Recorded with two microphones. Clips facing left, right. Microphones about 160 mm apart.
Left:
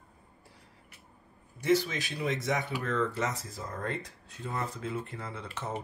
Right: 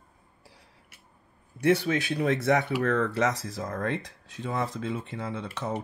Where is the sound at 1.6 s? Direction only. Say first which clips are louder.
Right 4 dB; 60° right (ahead or behind).